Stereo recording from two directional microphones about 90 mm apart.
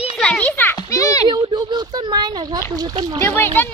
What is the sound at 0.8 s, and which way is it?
Children playing, 40° left (ahead or behind).